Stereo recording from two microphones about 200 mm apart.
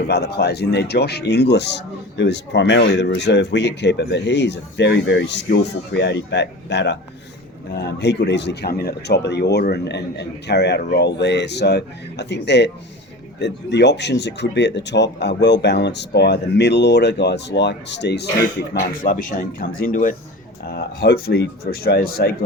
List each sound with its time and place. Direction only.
0.1 s a man's voice: 55° left (ahead or behind)
20.7 s speech: 50° left (ahead or behind)